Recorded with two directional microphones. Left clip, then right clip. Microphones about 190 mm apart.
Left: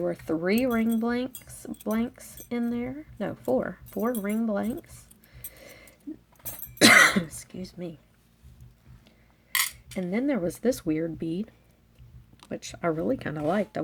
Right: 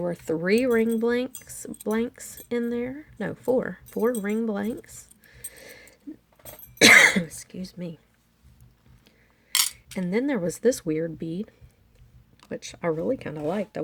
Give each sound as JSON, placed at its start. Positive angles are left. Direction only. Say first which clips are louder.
{"t": 0.0, "sound": "speech", "louder": "right 1 dB", "side_deg": -30}
{"t": 6.7, "sound": "cough", "louder": "right 3 dB", "side_deg": -10}
{"t": 7.1, "sound": "speech", "louder": "right 2 dB", "side_deg": -25}
{"t": 9.0, "sound": "speech", "louder": "right 5 dB", "side_deg": -35}
{"t": 12.5, "sound": "speech", "louder": "right 1 dB", "side_deg": -15}